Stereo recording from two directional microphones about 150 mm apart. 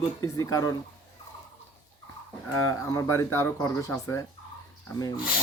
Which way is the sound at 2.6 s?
20° left (ahead or behind).